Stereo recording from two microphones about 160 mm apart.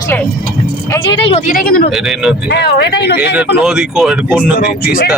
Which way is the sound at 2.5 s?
90° left.